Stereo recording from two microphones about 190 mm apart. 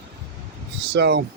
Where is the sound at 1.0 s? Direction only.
60° right (ahead or behind).